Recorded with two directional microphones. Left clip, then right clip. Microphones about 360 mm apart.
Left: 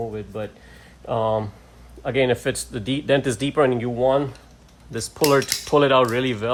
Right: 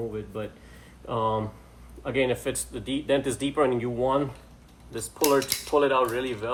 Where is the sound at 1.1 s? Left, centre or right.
Left.